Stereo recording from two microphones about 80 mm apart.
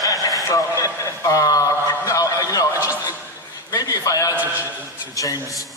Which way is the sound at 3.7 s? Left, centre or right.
Left.